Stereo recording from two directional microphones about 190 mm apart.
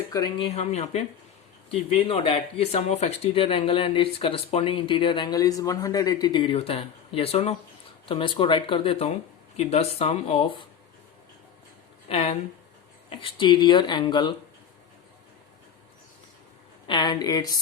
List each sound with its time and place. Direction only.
0.1 s speech: 20° left (ahead or behind)
12.0 s speech: 30° left (ahead or behind)
16.8 s speech: 25° left (ahead or behind)